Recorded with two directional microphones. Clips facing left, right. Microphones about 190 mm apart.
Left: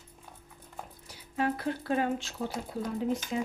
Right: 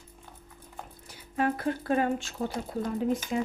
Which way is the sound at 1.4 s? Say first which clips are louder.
Right 2 dB; 50° right (ahead or behind).